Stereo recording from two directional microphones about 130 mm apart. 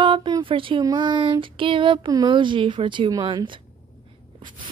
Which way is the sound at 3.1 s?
25° right (ahead or behind).